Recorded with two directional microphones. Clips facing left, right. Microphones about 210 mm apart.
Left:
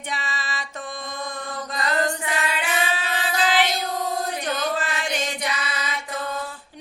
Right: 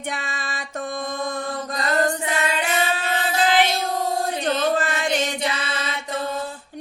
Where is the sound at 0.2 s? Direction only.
50° right (ahead or behind).